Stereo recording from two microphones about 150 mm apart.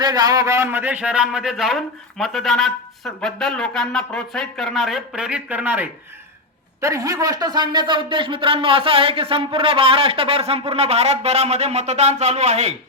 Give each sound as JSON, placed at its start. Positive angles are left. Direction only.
{"t": 0.0, "sound": "a man's voice", "side_deg": -25}
{"t": 6.8, "sound": "speech", "side_deg": -20}